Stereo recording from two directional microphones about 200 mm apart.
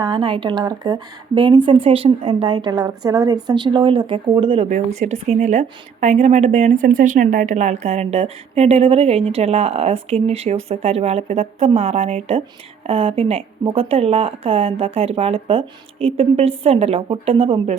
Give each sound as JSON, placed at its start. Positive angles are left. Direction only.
{"t": 0.0, "sound": "speech", "side_deg": -25}